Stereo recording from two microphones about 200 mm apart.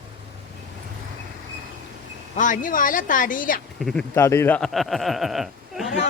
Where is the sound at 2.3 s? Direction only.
40° left (ahead or behind).